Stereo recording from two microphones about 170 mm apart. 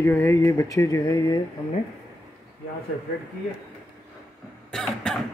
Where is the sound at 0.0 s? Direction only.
15° left (ahead or behind).